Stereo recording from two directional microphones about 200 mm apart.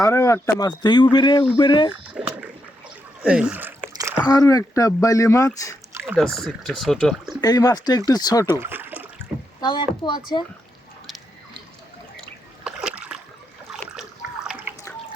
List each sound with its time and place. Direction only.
0.0 s speech: 15° left (ahead or behind)
2.1 s splash: 5° right (ahead or behind)
3.2 s a sound: 5° right (ahead or behind)
4.2 s speech: 15° left (ahead or behind)
5.9 s rowboat: 10° right (ahead or behind)
6.1 s speech: centre (ahead or behind)
7.4 s speech: 20° left (ahead or behind)
8.4 s a sound: 10° right (ahead or behind)
9.6 s speech: 20° left (ahead or behind)
12.6 s splash: 5° right (ahead or behind)
14.7 s trickle: 10° right (ahead or behind)